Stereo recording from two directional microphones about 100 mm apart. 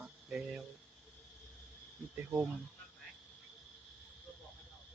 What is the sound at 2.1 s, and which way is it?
Speech, 20° right (ahead or behind).